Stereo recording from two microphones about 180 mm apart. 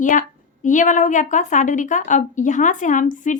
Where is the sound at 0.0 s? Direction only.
45° left (ahead or behind).